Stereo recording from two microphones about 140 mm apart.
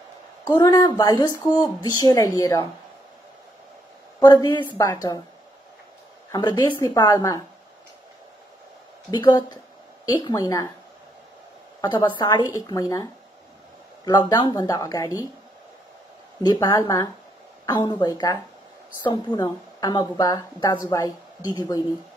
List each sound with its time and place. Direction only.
0.6 s speech: 25° left (ahead or behind)
4.2 s speech: 30° left (ahead or behind)
6.3 s speech: 30° left (ahead or behind)
9.1 s speech: 30° left (ahead or behind)
11.8 s speech: 30° left (ahead or behind)
16.4 s speech: 30° left (ahead or behind)